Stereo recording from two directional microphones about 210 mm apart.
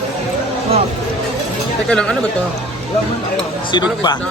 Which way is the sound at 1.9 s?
5° left (ahead or behind).